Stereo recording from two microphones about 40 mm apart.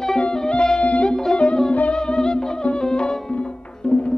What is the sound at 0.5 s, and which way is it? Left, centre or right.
Music, left.